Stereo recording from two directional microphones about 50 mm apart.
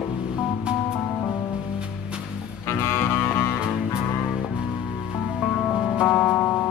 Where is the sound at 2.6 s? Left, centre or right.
Left.